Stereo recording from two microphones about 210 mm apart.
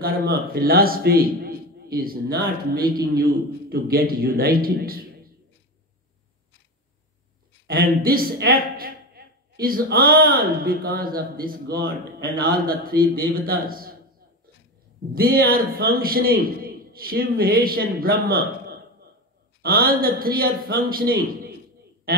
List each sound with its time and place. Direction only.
0.0 s a man's voice: 45° right (ahead or behind)
7.6 s a man's voice: 45° right (ahead or behind)
15.1 s a man's voice: 45° right (ahead or behind)